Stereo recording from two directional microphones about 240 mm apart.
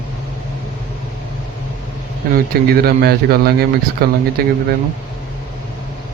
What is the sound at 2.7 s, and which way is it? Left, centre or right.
A man's voice, right.